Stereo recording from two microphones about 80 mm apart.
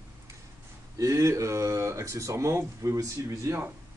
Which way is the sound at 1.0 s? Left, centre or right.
Right.